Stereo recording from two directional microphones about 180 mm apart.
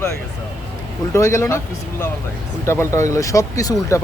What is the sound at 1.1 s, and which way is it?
Speech, 15° left (ahead or behind).